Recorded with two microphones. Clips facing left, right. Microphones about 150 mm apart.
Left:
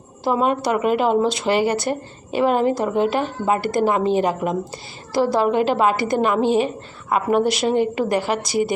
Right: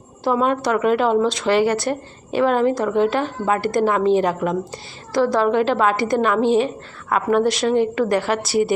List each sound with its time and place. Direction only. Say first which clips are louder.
0.3 s a woman's voice: right 1 dB; 5° left (ahead or behind)